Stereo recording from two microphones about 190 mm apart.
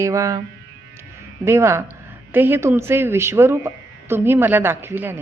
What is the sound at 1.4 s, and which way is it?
Speech, 15° right (ahead or behind).